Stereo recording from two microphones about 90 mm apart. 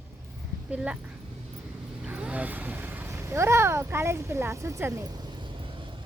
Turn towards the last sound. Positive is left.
turn(degrees=-65)  # may be behind; listen again after turning